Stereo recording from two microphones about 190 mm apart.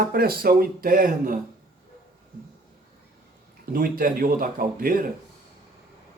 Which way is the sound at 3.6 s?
50° right (ahead or behind).